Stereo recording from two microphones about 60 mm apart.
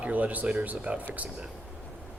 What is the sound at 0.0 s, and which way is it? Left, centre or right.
Speech, right.